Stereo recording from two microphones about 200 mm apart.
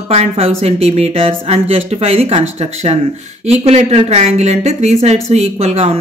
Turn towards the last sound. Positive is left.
turn(degrees=-30)  # may be behind; listen again after turning